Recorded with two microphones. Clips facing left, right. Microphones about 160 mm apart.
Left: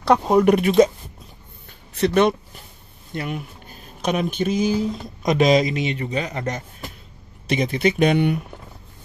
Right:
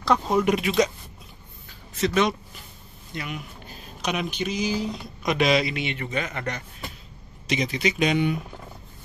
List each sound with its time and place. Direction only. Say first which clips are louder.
0.5 s speech: left 7 dB; 50° left (ahead or behind)
2.0 s speech: left 5 dB; 60° left (ahead or behind)
3.1 s speech: left 6 dB; 50° left (ahead or behind)
7.4 s speech: left 5 dB; 55° left (ahead or behind)